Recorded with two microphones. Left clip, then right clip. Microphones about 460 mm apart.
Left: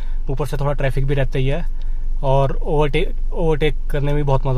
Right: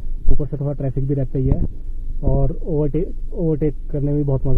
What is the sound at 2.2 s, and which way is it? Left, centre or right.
Speech, centre.